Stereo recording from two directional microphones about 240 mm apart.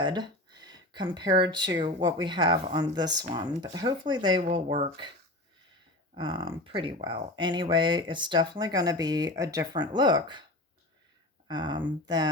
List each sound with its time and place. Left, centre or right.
0.0 s speech: centre
6.1 s speech: right
11.4 s speech: centre